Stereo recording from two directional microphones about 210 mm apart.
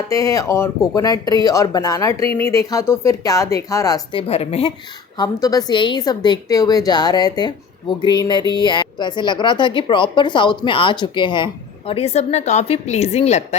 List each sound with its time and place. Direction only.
0.1 s speech: 15° left (ahead or behind)
5.1 s a woman's voice: 20° left (ahead or behind)